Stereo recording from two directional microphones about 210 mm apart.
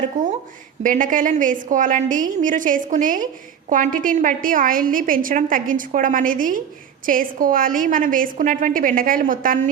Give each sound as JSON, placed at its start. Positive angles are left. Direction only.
{"t": 0.2, "sound": "a woman's voice", "side_deg": -35}